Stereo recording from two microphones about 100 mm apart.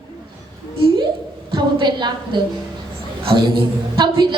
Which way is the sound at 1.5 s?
50° right (ahead or behind).